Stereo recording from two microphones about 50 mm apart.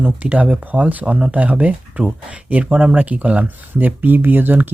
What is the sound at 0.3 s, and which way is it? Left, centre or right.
Speech, centre.